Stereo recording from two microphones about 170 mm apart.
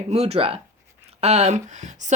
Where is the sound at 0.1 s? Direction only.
40° right (ahead or behind).